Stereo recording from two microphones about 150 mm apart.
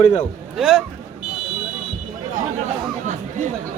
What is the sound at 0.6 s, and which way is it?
Speech, centre (ahead or behind).